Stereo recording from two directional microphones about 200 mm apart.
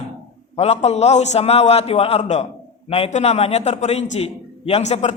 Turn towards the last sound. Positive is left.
turn(degrees=35)  # may be behind; listen again after turning